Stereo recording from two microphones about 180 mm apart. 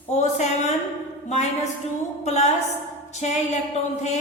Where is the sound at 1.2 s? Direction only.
40° left (ahead or behind).